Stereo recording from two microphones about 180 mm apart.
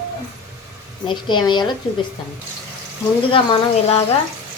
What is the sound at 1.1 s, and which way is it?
Speech, 25° left (ahead or behind).